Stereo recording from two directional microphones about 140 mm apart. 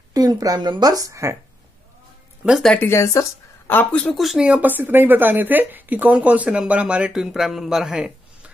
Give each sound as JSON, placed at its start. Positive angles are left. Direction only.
{"t": 0.1, "sound": "a woman's voice", "side_deg": -25}
{"t": 2.4, "sound": "speech", "side_deg": 0}
{"t": 2.8, "sound": "speech", "side_deg": 20}